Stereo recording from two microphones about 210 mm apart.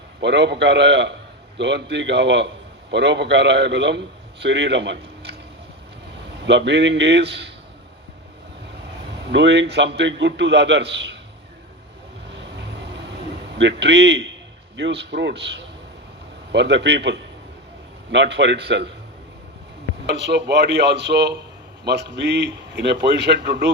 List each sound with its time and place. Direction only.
0.2 s a man's voice: 55° right (ahead or behind)
6.4 s a man's voice: 55° right (ahead or behind)
9.3 s a man's voice: 55° right (ahead or behind)
12.3 s vehicle: 55° right (ahead or behind)
13.6 s a man's voice: 55° right (ahead or behind)
20.1 s a man's voice: 55° right (ahead or behind)